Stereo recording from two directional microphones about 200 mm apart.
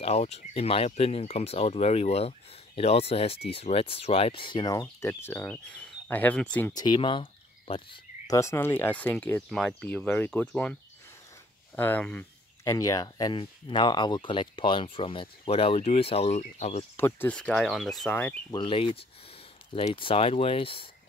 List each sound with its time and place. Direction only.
0.0 s speech: 30° left (ahead or behind); by 6.7 s 5° left (ahead or behind)
6.7 s speech: 20° left (ahead or behind)
8.3 s speech: 15° left (ahead or behind); by 16.8 s 35° left (ahead or behind)
16.9 s speech: 10° left (ahead or behind)
18.5 s speech: 25° left (ahead or behind)